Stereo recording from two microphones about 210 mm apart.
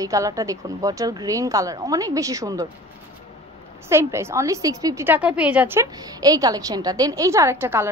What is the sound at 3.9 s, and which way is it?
A woman's voice, 10° right (ahead or behind).